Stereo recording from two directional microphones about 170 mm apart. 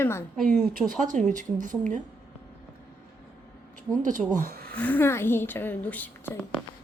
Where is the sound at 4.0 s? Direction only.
50° right (ahead or behind).